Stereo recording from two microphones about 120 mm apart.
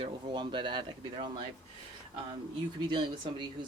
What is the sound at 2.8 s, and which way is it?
Speech, 40° right (ahead or behind).